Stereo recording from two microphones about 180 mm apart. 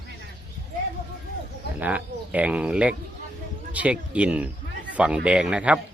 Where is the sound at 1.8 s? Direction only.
10° right (ahead or behind).